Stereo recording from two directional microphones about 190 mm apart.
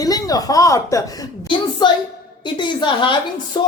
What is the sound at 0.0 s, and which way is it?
A woman's voice, 20° left (ahead or behind).